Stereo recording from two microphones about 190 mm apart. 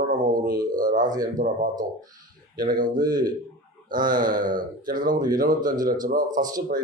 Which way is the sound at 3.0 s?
20° right (ahead or behind).